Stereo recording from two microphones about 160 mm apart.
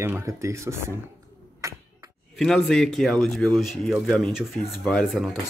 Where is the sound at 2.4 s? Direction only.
5° left (ahead or behind).